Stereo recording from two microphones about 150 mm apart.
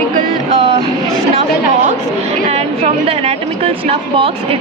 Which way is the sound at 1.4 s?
55° right (ahead or behind).